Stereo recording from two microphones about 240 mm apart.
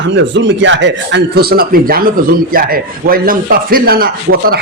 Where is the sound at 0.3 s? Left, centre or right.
Right.